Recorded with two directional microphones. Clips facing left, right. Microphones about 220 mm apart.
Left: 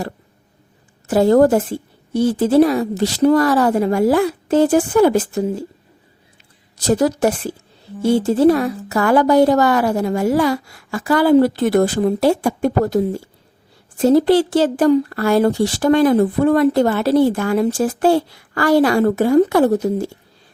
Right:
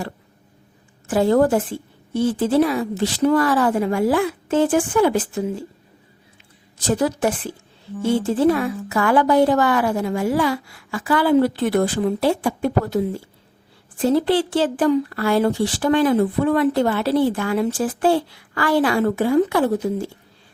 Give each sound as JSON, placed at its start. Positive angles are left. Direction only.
{"t": 1.0, "sound": "a woman's voice", "side_deg": 40}
{"t": 6.8, "sound": "a woman's voice", "side_deg": 40}